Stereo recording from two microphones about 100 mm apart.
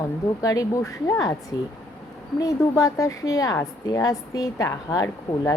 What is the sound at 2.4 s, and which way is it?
A woman's voice, 35° left (ahead or behind).